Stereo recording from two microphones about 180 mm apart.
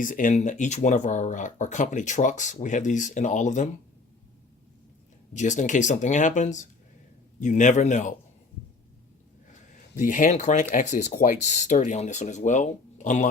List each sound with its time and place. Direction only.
0.0 s speech: 45° left (ahead or behind)
5.3 s speech: 45° left (ahead or behind)
9.5 s speech: 45° left (ahead or behind)